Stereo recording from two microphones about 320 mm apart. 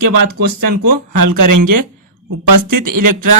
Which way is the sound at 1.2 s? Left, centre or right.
Right.